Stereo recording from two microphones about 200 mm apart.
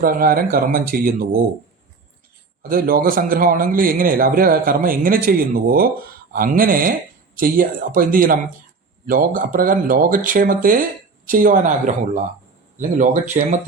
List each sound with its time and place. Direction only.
0.0 s a man's voice: 45° right (ahead or behind)
2.6 s a man's voice: 45° right (ahead or behind)